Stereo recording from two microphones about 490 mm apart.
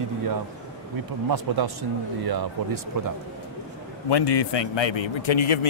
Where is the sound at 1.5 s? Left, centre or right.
Right.